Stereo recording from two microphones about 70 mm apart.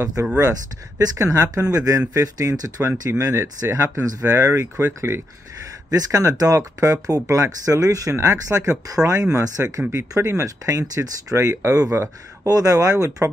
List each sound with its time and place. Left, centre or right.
1.1 s speech: right
5.9 s speech: right